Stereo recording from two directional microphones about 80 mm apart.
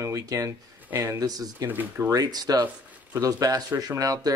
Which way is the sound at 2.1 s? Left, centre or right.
Right.